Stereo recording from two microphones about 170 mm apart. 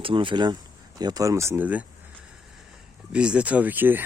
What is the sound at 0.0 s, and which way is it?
Speech, 30° right (ahead or behind).